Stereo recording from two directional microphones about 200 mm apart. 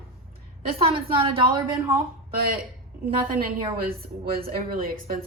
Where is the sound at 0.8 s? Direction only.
25° right (ahead or behind).